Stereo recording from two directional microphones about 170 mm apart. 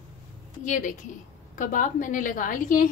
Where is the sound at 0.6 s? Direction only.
50° left (ahead or behind).